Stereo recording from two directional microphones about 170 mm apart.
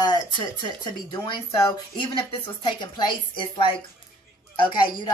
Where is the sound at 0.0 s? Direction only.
25° left (ahead or behind).